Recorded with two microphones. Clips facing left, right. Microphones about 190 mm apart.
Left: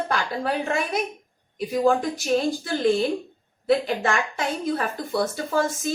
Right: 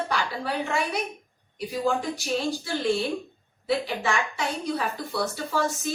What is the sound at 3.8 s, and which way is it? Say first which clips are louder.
Speech: left 3 dB; 50° left (ahead or behind).